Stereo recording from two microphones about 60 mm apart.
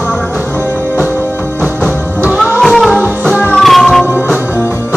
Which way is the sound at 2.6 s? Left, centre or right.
Centre.